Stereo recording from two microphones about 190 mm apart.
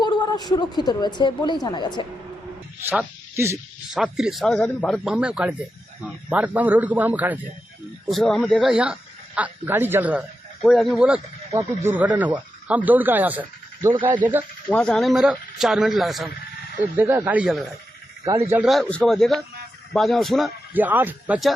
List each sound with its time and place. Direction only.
0.0 s a woman's voice: 25° left (ahead or behind)
2.8 s a man's voice: 5° right (ahead or behind)
3.3 s speech: 15° right (ahead or behind)
3.9 s a man's voice: 5° right (ahead or behind)
8.7 s a man's voice: 5° right (ahead or behind)
13.9 s speech: 25° right (ahead or behind)
14.7 s a man's voice: 5° left (ahead or behind)
17.0 s speech: 10° right (ahead or behind)
18.3 s speech: 15° right (ahead or behind)
18.6 s a man's voice: centre (ahead or behind)